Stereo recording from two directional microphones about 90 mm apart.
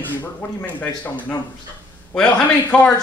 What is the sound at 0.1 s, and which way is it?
A man's voice, 20° left (ahead or behind).